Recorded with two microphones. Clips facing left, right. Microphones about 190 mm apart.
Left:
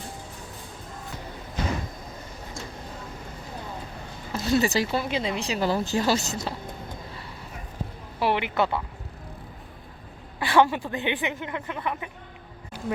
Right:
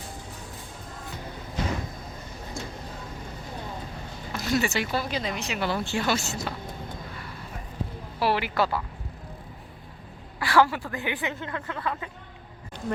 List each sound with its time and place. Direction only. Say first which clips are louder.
4.3 s speech: left 3 dB; 30° left (ahead or behind)
4.9 s speech: left 2 dB; 25° left (ahead or behind)
8.2 s speech: left 1 dB; 20° left (ahead or behind)
10.4 s speech: left 1 dB; 20° left (ahead or behind)